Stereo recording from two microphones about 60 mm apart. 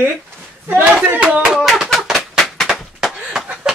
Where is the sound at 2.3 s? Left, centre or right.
Centre.